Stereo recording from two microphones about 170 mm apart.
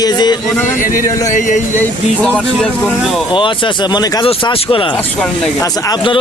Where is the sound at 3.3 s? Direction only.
30° left (ahead or behind).